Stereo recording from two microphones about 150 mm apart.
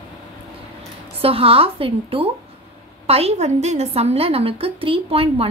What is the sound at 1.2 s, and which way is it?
A woman's voice, 40° right (ahead or behind).